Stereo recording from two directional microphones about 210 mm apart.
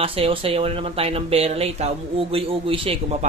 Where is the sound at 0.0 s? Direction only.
25° right (ahead or behind).